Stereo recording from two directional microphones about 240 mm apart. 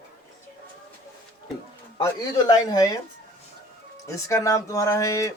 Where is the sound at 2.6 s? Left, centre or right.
Centre.